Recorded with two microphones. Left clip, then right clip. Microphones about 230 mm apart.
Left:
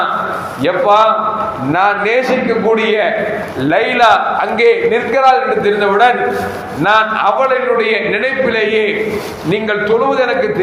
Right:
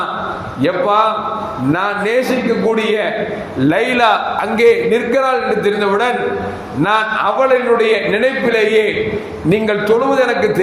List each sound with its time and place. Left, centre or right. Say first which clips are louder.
0.6 s a man's voice: left 3 dB; right